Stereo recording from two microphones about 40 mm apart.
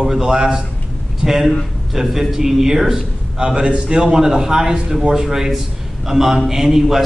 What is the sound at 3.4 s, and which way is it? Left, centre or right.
A man's voice, right.